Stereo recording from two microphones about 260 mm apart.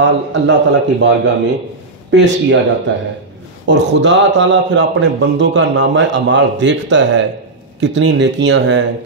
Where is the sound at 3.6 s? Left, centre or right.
Right.